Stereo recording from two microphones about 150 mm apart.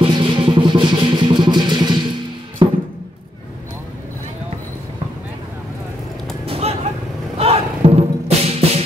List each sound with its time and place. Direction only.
0.0 s music: 35° right (ahead or behind)
6.4 s a sound: 40° right (ahead or behind)
7.3 s music: 40° right (ahead or behind)